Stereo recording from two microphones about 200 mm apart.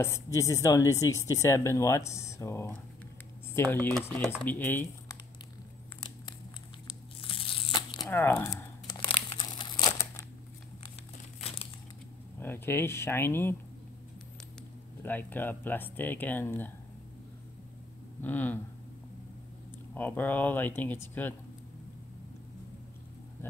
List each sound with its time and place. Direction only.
0.0 s speech: 15° left (ahead or behind)
3.8 s speech: 10° left (ahead or behind)
7.2 s tearing: 25° left (ahead or behind)
8.0 s crumpling: 10° left (ahead or behind)
12.4 s speech: 10° left (ahead or behind)
15.0 s speech: 10° left (ahead or behind)
18.2 s speech: 10° left (ahead or behind)
19.9 s speech: 10° left (ahead or behind)